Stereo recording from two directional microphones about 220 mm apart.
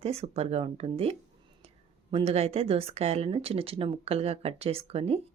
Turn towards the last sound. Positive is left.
turn(degrees=-30)  # may be behind; listen again after turning